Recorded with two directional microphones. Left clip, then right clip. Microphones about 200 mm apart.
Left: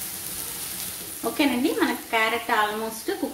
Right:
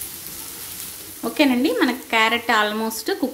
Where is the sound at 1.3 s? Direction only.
40° right (ahead or behind).